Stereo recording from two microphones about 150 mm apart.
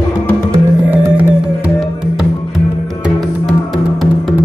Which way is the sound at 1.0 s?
10° right (ahead or behind).